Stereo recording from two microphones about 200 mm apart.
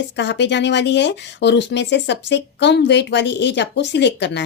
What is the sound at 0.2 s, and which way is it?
A woman's voice, 60° left (ahead or behind).